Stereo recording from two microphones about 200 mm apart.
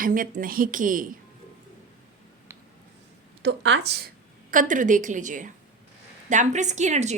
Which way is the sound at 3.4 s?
65° right (ahead or behind).